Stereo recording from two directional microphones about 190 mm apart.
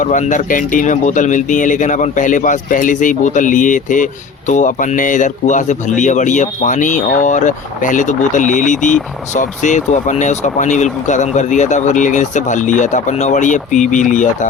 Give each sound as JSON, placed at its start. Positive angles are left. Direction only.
{"t": 0.0, "sound": "speech", "side_deg": 40}